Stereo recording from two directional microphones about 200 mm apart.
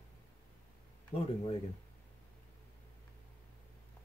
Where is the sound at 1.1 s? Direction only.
30° left (ahead or behind).